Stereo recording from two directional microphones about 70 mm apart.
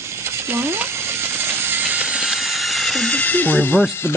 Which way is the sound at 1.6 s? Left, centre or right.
Right.